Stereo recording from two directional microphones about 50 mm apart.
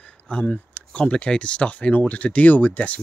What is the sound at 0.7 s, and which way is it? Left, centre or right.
Speech, left.